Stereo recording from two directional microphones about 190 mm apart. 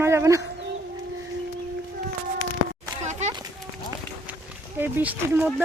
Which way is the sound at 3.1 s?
35° right (ahead or behind).